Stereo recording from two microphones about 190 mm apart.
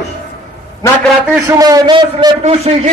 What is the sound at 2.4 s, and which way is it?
Speech, 35° right (ahead or behind).